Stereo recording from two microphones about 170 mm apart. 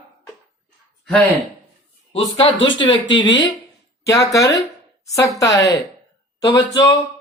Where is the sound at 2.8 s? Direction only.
30° left (ahead or behind).